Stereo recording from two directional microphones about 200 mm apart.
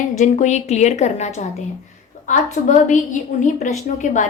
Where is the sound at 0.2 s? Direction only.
35° left (ahead or behind).